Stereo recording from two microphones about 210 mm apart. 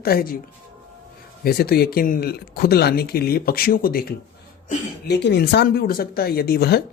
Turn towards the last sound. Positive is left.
turn(degrees=50)  # may be behind; listen again after turning